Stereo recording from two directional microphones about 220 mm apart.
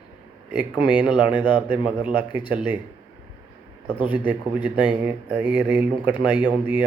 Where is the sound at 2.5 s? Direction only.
10° right (ahead or behind).